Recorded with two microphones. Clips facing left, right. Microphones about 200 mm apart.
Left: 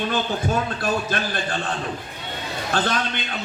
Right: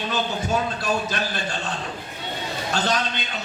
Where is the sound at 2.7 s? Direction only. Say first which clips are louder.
Left 1 dB; 55° left (ahead or behind).